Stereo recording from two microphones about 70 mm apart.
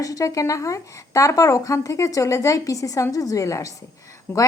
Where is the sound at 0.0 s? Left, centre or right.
Left.